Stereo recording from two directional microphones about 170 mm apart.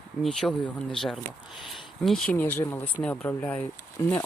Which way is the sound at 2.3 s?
10° left (ahead or behind).